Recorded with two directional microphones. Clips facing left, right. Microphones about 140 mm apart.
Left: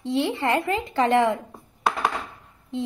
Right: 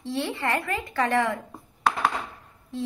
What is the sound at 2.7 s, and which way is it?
Busy signal, 20° left (ahead or behind).